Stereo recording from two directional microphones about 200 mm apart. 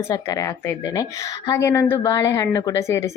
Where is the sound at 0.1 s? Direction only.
15° left (ahead or behind).